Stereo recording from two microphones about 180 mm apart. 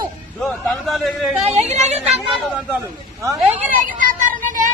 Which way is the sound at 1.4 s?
40° right (ahead or behind).